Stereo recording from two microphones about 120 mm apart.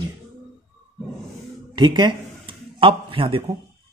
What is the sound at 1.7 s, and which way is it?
A man's voice, 40° right (ahead or behind).